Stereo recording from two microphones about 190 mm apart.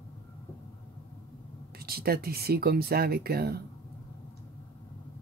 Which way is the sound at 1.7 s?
55° right (ahead or behind).